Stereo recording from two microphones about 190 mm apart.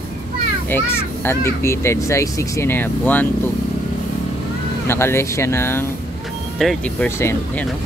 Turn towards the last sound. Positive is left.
turn(degrees=10)  # may be behind; listen again after turning